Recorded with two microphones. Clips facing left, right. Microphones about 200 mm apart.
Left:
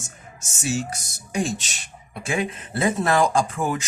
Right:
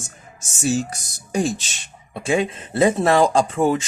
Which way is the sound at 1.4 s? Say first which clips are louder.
Right 3 dB; 30° right (ahead or behind).